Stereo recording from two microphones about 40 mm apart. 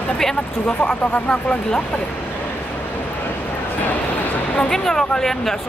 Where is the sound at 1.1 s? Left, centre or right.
Left.